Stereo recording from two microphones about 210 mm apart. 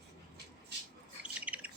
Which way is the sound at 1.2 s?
5° right (ahead or behind).